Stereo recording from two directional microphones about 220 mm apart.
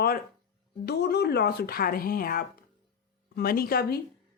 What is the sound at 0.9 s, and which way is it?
A woman's voice, 45° left (ahead or behind).